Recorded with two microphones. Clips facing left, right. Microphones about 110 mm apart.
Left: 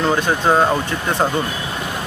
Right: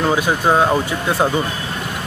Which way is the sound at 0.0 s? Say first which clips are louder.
Even; 5° right (ahead or behind).